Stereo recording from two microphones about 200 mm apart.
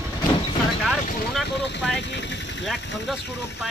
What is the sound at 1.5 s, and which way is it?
Speech, 60° left (ahead or behind).